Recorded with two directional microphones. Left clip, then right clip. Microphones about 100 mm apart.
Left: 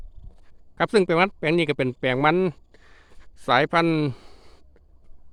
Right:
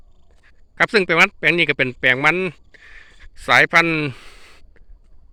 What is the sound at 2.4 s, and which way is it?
Speech, 65° left (ahead or behind).